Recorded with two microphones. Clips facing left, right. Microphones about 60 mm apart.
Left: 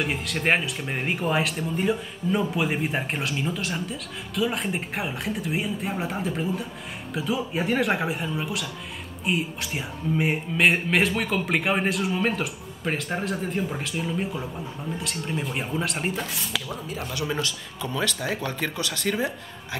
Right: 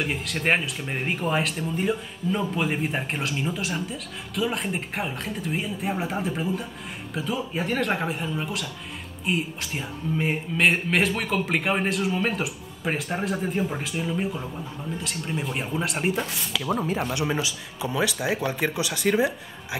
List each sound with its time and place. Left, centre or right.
0.0 s speech: centre
16.8 s speech: right
17.1 s a man's voice: right
17.4 s speech: centre